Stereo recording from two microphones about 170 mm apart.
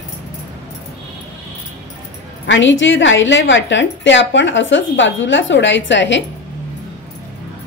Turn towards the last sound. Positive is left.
turn(degrees=90)